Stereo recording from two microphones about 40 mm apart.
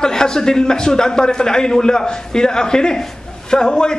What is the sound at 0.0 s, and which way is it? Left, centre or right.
A man's voice, centre.